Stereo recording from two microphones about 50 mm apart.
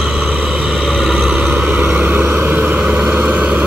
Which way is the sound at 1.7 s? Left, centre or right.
Right.